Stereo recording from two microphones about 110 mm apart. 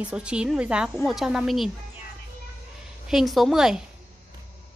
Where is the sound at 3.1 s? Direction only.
Centre (ahead or behind).